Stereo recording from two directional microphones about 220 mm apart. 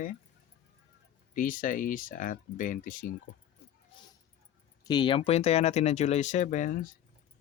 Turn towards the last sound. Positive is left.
turn(degrees=35)  # may be behind; listen again after turning